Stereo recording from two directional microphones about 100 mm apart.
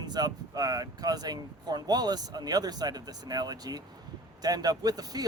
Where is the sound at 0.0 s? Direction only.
45° right (ahead or behind).